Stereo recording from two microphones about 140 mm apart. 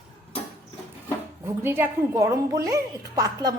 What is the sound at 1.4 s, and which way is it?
A woman's voice, 15° right (ahead or behind).